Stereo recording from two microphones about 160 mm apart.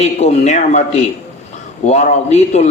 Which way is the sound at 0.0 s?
45° left (ahead or behind).